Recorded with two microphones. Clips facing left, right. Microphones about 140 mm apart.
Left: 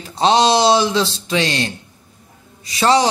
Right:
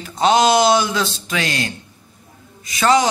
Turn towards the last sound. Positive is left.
turn(degrees=30)  # may be behind; listen again after turning